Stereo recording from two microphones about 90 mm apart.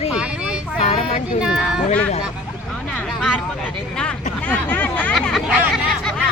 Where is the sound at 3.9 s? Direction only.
10° left (ahead or behind).